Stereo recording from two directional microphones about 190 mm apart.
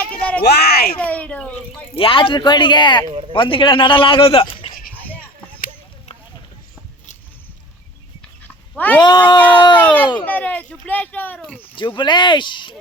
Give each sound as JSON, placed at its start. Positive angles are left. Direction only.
{"t": 0.0, "sound": "a sound", "side_deg": 5}
{"t": 0.4, "sound": "a child's voice", "side_deg": 60}
{"t": 0.9, "sound": "a sound", "side_deg": 10}
{"t": 2.0, "sound": "a man's voice", "side_deg": 30}
{"t": 3.1, "sound": "speech", "side_deg": -30}
{"t": 3.3, "sound": "a man's voice", "side_deg": 25}
{"t": 8.7, "sound": "speech", "side_deg": 10}
{"t": 9.0, "sound": "a man's voice", "side_deg": 25}
{"t": 9.8, "sound": "speech", "side_deg": 10}
{"t": 11.9, "sound": "a man's voice", "side_deg": 25}